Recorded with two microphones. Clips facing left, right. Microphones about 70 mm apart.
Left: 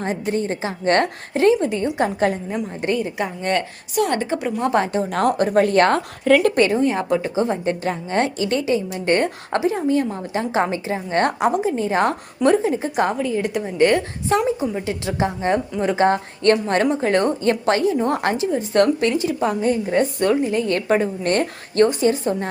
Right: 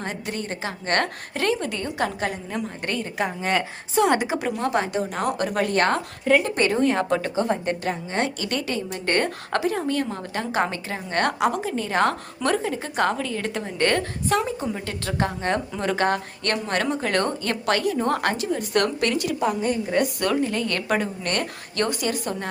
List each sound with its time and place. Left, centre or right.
0.0 s a woman's voice: left
2.5 s a woman's voice: centre
3.2 s a woman's voice: centre
3.9 s a woman's voice: centre
4.6 s speech: left
6.7 s a woman's voice: centre
7.9 s speech: left
8.4 s a woman's voice: left
14.3 s a woman's voice: left
14.6 s a woman's voice: centre; by 19.4 s left
19.4 s a woman's voice: left